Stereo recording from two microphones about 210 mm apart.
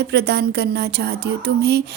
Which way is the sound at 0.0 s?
50° right (ahead or behind).